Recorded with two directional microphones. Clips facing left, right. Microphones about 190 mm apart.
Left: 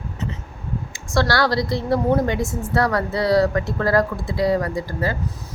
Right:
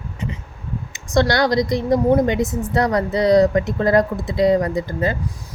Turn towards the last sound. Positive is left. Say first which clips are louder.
# right 3 dB
turn(degrees=-20)  # may be behind; listen again after turning